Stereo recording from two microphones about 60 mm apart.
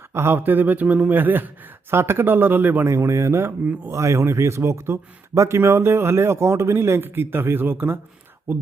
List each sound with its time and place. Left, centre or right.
0.1 s speech: right
2.8 s speech: right